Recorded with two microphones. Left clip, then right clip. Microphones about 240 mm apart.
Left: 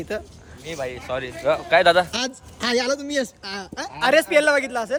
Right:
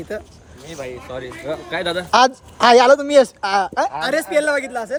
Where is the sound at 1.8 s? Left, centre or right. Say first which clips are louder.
Left 6 dB; centre.